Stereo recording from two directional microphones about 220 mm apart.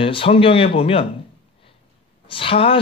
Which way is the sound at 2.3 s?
25° left (ahead or behind).